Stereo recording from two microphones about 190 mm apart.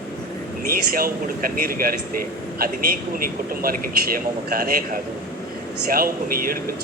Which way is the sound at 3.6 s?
50° right (ahead or behind).